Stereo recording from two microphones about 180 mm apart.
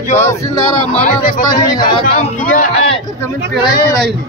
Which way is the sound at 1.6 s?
20° left (ahead or behind).